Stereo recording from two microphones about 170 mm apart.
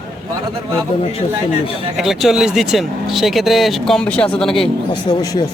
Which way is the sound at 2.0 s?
Centre (ahead or behind).